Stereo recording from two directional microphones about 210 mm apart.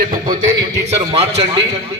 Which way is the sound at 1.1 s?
30° right (ahead or behind).